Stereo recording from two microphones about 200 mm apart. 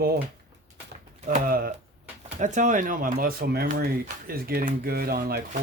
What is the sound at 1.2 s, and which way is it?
Speech, 40° right (ahead or behind).